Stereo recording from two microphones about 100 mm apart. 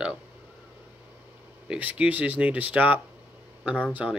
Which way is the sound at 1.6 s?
10° right (ahead or behind).